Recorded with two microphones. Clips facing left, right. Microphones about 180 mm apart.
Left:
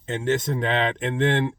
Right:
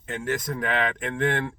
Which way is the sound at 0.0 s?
25° left (ahead or behind).